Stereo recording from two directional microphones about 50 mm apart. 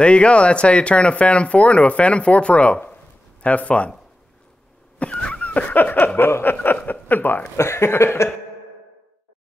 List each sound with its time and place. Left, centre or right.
0.0 s speech: left
5.1 s dog: centre
5.4 s a sound: left
6.5 s chuckle: left
6.9 s a sound: left
7.5 s speech: left